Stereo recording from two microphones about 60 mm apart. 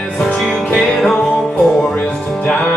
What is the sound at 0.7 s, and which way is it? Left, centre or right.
Music, centre.